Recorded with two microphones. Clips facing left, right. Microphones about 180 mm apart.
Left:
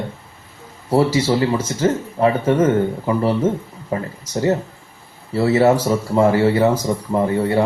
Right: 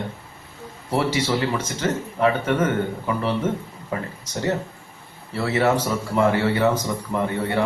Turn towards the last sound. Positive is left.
turn(degrees=30)  # may be behind; listen again after turning